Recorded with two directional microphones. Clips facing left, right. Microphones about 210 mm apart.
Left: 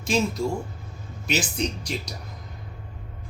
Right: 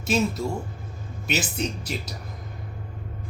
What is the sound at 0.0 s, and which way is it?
Speech, 5° right (ahead or behind).